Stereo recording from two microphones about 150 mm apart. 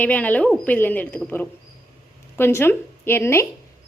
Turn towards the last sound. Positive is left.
turn(degrees=15)  # may be behind; listen again after turning